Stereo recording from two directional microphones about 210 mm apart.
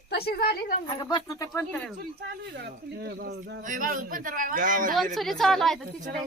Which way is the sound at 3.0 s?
50° right (ahead or behind).